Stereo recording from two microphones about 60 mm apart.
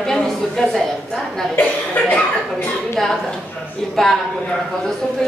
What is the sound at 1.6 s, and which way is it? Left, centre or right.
Speech, left.